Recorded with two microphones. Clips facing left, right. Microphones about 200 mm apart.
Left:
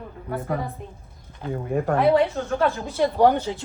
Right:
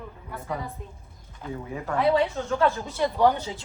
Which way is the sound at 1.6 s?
50° left (ahead or behind).